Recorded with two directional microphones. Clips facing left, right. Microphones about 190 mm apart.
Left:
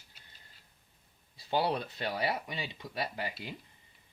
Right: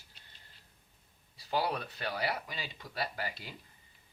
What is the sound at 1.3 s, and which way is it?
Speech, 25° left (ahead or behind).